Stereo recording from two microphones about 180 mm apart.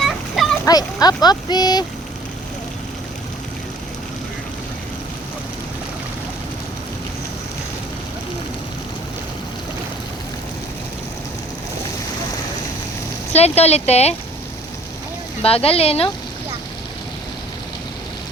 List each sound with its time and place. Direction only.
0.0 s a sound: centre (ahead or behind)
0.6 s speech: 20° left (ahead or behind)
13.3 s speech: 35° left (ahead or behind)
15.4 s speech: 30° left (ahead or behind)